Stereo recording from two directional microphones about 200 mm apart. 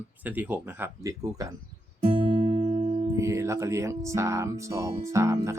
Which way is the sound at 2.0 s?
30° right (ahead or behind).